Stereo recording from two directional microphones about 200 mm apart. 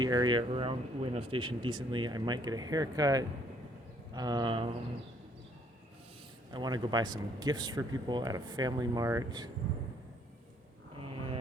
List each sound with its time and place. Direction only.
0.0 s speech: 20° right (ahead or behind)
6.5 s speech: 20° right (ahead or behind)